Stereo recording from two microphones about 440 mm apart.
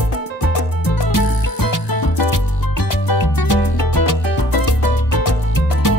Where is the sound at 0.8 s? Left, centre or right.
Left.